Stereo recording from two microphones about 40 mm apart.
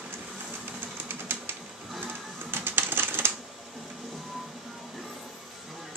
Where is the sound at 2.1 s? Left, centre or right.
Right.